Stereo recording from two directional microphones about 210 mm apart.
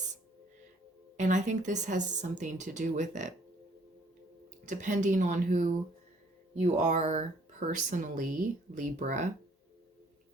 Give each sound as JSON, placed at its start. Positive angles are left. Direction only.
{"t": 1.1, "sound": "speech", "side_deg": -35}
{"t": 4.6, "sound": "speech", "side_deg": -35}